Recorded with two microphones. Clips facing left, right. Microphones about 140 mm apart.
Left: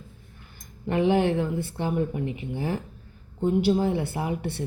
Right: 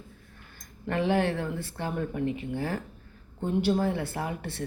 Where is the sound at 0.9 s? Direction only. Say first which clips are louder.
Left 4 dB; 15° left (ahead or behind).